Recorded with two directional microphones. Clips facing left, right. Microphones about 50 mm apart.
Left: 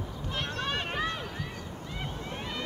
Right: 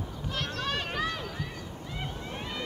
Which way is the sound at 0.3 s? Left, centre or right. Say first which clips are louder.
Even; left.